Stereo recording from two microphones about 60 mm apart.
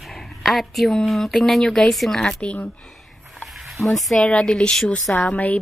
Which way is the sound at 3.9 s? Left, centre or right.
Centre.